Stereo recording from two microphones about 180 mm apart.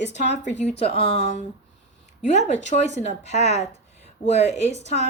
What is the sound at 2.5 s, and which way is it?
A woman's voice, 40° left (ahead or behind).